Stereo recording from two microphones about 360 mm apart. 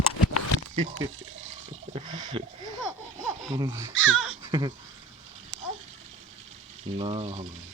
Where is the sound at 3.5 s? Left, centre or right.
Centre.